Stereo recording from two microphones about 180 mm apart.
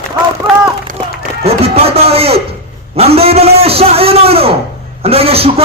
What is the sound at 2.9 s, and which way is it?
A man's voice, 35° right (ahead or behind).